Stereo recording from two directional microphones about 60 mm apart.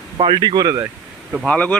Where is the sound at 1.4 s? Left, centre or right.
Centre.